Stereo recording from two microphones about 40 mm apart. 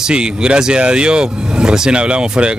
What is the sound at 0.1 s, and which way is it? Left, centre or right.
Speech, right.